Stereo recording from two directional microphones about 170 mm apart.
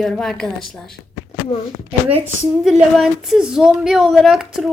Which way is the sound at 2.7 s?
5° right (ahead or behind).